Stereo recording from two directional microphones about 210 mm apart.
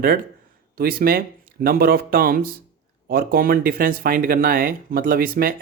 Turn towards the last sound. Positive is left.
turn(degrees=-45)  # may be behind; listen again after turning